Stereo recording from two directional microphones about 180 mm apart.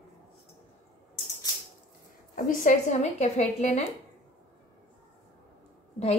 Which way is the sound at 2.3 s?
45° left (ahead or behind).